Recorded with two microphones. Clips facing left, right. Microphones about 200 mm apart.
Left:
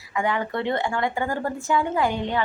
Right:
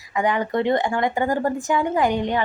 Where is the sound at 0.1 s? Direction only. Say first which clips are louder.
Right 3 dB; 15° right (ahead or behind).